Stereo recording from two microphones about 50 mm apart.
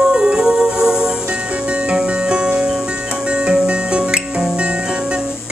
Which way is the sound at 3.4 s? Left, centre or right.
Right.